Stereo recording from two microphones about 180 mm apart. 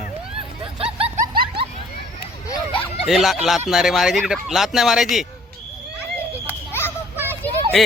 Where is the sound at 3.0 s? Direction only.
Centre (ahead or behind).